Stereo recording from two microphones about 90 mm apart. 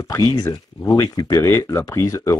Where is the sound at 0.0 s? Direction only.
35° left (ahead or behind).